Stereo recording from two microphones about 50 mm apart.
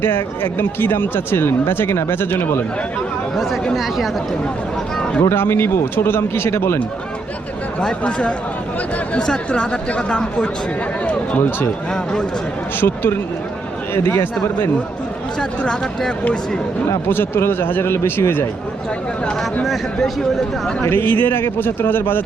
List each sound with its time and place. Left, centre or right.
0.0 s speech: left
3.3 s speech: centre
5.3 s speech: left
7.8 s speech: centre
11.0 s a sound: left
12.8 s speech: left
15.4 s speech: centre
17.1 s speech: left
20.8 s speech: left